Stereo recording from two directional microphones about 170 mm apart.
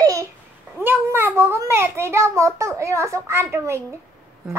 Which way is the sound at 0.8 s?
15° right (ahead or behind).